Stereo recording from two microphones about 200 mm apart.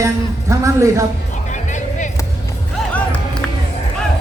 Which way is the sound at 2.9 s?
5° left (ahead or behind).